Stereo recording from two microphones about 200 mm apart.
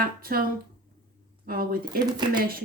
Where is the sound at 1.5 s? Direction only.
45° right (ahead or behind).